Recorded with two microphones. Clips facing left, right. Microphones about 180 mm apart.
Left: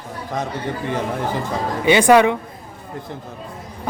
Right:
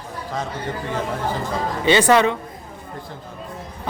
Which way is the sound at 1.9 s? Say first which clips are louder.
Left 3 dB; 10° left (ahead or behind).